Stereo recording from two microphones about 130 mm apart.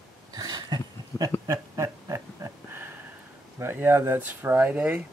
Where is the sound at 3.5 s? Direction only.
15° right (ahead or behind).